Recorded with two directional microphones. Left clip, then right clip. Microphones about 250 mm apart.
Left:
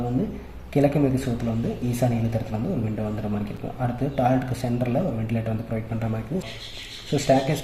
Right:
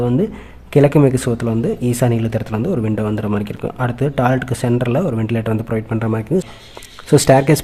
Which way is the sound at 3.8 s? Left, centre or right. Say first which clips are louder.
Right 6 dB; right.